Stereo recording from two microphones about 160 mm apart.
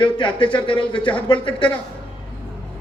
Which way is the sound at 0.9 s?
10° left (ahead or behind).